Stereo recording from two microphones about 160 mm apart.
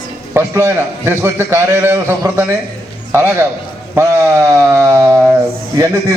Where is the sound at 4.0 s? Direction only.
20° right (ahead or behind).